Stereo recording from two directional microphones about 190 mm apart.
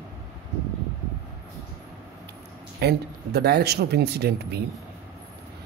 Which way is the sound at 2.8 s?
60° right (ahead or behind).